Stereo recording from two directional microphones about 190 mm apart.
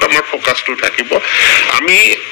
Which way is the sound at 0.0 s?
55° left (ahead or behind).